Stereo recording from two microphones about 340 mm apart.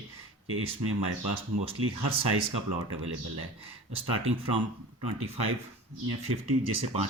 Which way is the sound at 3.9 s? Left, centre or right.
Right.